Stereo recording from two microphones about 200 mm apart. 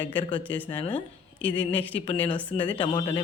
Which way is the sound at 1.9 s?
30° left (ahead or behind).